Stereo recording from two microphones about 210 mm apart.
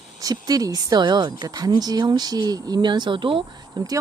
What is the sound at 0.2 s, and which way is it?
A woman's voice, 15° right (ahead or behind).